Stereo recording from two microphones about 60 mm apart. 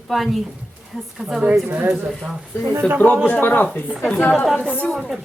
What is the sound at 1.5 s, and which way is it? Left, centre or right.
Speech, right.